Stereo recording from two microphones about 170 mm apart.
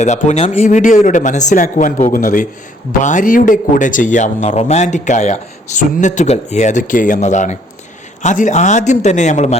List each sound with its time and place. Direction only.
0.0 s speech: 45° left (ahead or behind)